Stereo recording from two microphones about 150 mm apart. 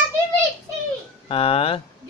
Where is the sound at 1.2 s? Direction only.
40° left (ahead or behind).